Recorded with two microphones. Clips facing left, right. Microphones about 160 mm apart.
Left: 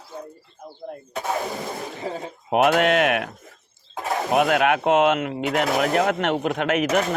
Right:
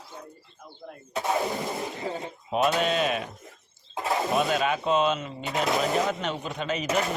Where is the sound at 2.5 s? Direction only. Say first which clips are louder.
Left 6 dB; 75° left (ahead or behind).